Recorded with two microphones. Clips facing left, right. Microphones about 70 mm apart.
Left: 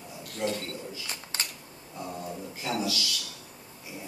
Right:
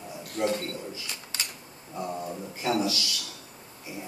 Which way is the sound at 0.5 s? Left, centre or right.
Right.